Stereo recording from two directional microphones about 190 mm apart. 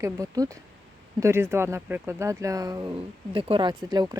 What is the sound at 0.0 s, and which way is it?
Speech, 15° right (ahead or behind).